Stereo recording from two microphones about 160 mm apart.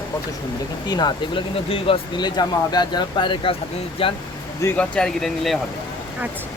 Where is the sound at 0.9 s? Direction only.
25° left (ahead or behind).